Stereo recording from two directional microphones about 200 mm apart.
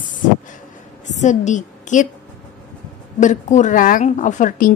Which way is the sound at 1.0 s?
35° left (ahead or behind).